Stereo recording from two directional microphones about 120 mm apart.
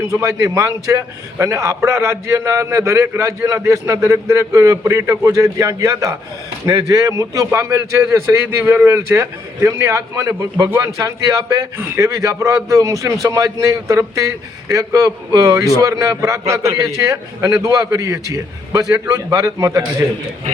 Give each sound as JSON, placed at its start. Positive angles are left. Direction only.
{"t": 0.1, "sound": "speech", "side_deg": -25}